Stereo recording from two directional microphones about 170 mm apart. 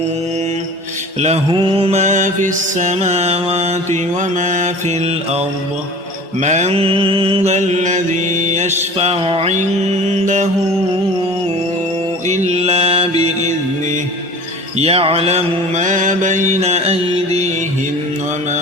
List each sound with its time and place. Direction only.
1.5 s mantra: 30° right (ahead or behind)
6.4 s mantra: 45° right (ahead or behind)
12.3 s mantra: 40° right (ahead or behind)
14.8 s mantra: 35° right (ahead or behind)